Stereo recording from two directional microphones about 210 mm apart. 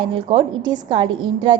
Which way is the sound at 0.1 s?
25° right (ahead or behind).